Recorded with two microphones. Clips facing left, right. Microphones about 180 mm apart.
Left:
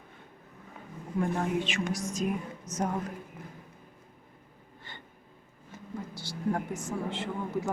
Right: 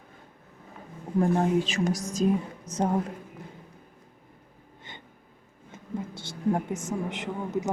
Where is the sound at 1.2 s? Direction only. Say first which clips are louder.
Right 6 dB; 35° right (ahead or behind).